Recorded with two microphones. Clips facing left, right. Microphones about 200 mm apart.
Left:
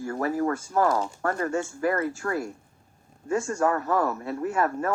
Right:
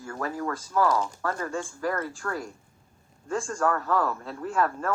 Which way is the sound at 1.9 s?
10° left (ahead or behind).